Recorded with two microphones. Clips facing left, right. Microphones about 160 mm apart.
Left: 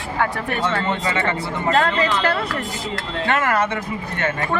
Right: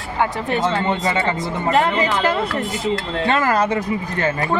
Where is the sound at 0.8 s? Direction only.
30° right (ahead or behind).